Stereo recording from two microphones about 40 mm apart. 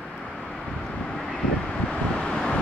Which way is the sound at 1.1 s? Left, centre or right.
Centre.